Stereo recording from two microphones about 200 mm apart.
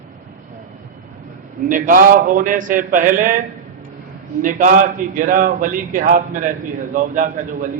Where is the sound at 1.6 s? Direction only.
40° right (ahead or behind).